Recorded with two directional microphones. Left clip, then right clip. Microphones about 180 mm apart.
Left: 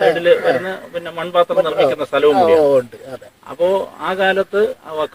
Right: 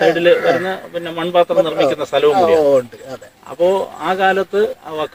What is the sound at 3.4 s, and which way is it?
A man's voice, 5° right (ahead or behind).